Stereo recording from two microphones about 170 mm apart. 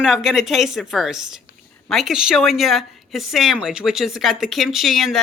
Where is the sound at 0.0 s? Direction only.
Centre (ahead or behind).